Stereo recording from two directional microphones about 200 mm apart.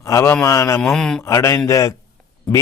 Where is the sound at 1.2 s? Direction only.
15° left (ahead or behind).